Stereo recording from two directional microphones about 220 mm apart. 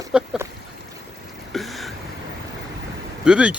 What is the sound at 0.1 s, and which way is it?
Speech, 5° right (ahead or behind).